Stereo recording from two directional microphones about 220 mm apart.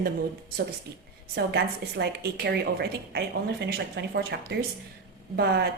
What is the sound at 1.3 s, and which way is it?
A woman's voice, 50° right (ahead or behind).